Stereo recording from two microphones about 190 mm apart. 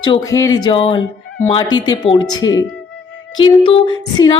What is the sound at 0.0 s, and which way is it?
A woman's voice, 20° left (ahead or behind).